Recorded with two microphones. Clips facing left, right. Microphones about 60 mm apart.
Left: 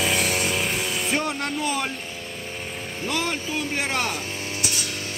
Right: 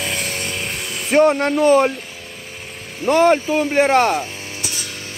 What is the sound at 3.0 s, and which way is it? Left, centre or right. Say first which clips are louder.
Speech: right 14 dB; right.